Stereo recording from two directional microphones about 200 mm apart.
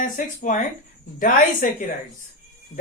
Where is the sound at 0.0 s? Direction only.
40° left (ahead or behind).